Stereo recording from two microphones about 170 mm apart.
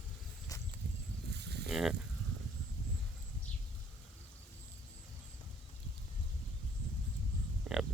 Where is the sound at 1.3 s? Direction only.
80° right.